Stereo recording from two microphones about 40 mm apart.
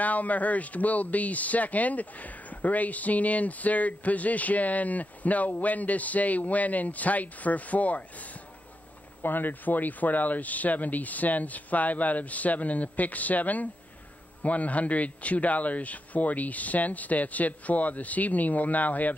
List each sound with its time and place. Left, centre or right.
0.0 s speech: left
9.2 s speech: left